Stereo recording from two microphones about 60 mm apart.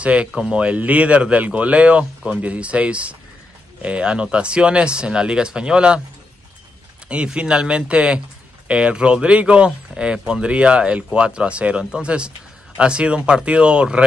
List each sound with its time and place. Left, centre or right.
0.0 s speech: right
7.1 s speech: centre